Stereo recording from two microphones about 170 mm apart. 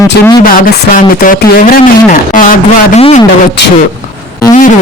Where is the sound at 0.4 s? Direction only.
55° left (ahead or behind).